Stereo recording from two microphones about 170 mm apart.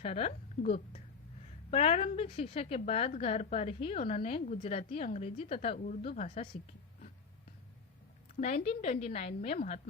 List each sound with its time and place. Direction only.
0.0 s a woman's voice: 40° left (ahead or behind)
8.4 s a woman's voice: 40° left (ahead or behind)